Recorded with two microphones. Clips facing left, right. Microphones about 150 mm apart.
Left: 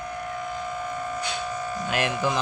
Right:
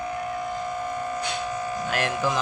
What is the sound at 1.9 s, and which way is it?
Speech, centre (ahead or behind).